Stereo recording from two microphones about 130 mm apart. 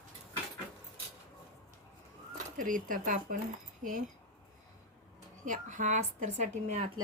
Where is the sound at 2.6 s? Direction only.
90° right.